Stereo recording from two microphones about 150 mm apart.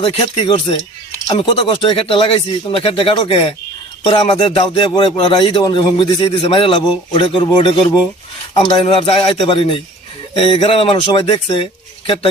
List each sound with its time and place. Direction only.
0.0 s speech: 35° left (ahead or behind)